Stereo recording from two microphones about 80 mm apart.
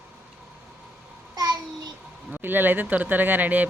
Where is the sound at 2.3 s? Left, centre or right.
Right.